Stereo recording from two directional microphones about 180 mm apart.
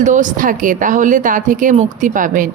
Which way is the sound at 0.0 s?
45° right (ahead or behind).